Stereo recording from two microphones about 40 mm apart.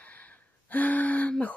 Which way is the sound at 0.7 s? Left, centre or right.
Left.